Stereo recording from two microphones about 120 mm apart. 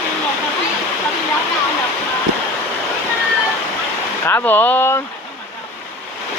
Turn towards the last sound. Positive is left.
turn(degrees=15)  # may be behind; listen again after turning